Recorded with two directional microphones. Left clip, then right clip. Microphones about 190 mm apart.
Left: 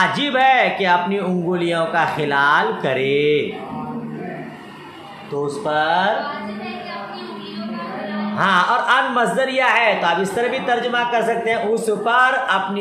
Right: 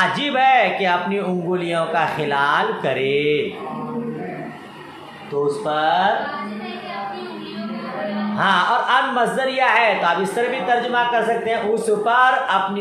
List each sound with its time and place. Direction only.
0.0 s a man's voice: 20° left (ahead or behind)
5.3 s speech: 15° left (ahead or behind)
8.4 s a man's voice: 20° left (ahead or behind)